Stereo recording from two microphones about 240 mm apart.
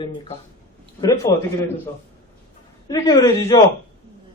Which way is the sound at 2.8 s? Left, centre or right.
Centre.